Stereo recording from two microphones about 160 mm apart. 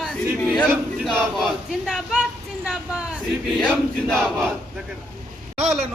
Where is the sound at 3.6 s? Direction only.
5° left (ahead or behind).